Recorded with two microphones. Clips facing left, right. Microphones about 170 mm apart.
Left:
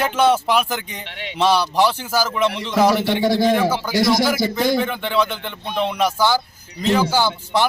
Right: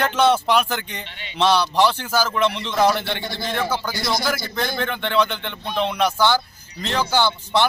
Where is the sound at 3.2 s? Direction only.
90° left.